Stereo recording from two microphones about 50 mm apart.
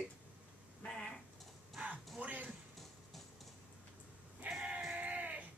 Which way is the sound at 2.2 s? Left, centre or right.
Right.